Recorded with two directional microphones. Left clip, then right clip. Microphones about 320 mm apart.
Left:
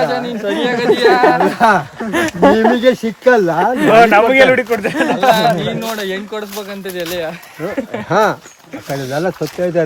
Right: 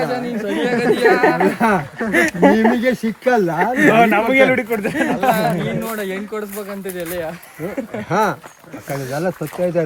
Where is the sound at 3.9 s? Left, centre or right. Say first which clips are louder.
Left 8 dB; left.